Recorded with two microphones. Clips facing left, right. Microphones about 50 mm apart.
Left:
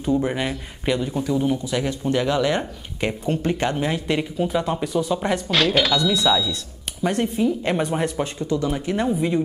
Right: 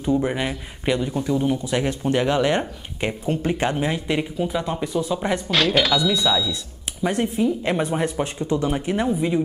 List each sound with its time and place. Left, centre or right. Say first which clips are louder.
0.0 s speech: even; centre
1.6 s speech: right 1 dB; right
3.1 s speech: even; centre
8.6 s speech: right 1 dB; centre
9.0 s speech: left 1 dB; centre